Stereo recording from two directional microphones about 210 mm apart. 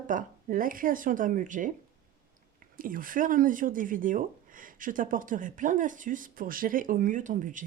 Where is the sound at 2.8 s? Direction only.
40° right (ahead or behind).